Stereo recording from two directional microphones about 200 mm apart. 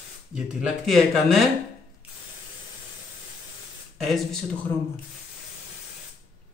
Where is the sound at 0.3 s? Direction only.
Centre (ahead or behind).